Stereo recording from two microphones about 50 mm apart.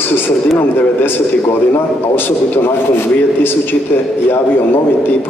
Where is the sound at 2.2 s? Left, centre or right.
Left.